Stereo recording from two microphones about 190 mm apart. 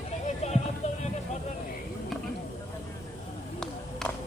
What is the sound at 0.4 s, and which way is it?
Music, 40° left (ahead or behind).